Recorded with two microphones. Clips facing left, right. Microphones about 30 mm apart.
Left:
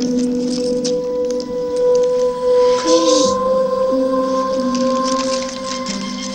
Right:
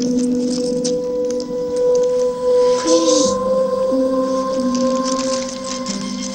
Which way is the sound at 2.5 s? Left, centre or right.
Centre.